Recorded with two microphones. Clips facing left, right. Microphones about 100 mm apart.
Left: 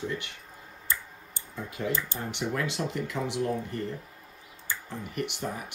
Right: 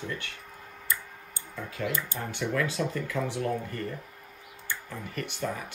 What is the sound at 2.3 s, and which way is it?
Speech, 20° left (ahead or behind).